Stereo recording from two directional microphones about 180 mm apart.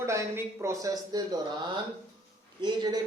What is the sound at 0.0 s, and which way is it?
Speech, 15° right (ahead or behind).